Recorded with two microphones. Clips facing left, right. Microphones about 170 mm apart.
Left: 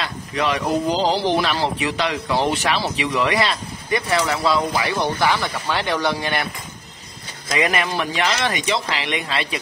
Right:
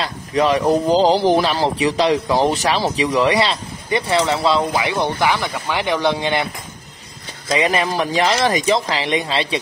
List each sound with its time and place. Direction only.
0.0 s speech: 40° right (ahead or behind)
1.4 s speech: 35° right (ahead or behind)
7.4 s speech: 30° right (ahead or behind)